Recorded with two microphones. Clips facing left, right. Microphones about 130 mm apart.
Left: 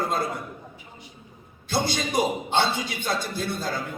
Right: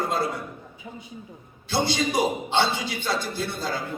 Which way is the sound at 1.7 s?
50° left (ahead or behind).